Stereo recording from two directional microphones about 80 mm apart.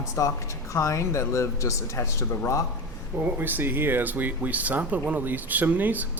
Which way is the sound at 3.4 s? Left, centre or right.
Right.